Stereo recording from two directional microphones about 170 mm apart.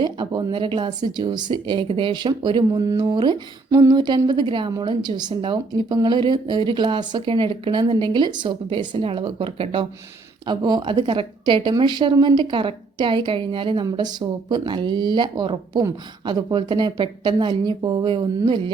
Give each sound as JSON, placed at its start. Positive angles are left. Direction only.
{"t": 0.0, "sound": "speech", "side_deg": -25}